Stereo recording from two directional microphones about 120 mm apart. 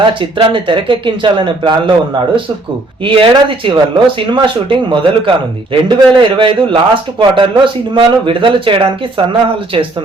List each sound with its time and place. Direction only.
0.1 s a man's voice: 45° right (ahead or behind)